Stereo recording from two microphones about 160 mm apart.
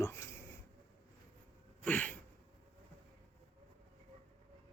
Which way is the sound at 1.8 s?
10° left (ahead or behind).